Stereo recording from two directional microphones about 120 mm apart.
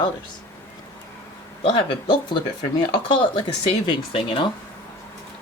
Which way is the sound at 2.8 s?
40° left (ahead or behind).